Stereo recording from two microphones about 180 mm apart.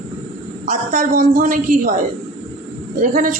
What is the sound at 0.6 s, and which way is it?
A woman's voice, 40° right (ahead or behind).